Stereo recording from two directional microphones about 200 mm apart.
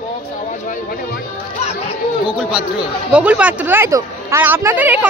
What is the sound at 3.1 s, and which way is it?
Speech, 5° right (ahead or behind).